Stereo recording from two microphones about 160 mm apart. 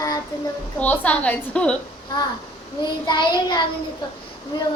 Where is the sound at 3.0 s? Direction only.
25° left (ahead or behind).